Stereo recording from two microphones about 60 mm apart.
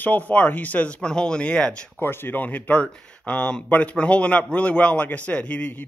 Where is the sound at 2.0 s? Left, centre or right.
Left.